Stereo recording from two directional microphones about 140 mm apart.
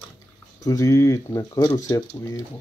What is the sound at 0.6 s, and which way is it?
Speech, 25° left (ahead or behind).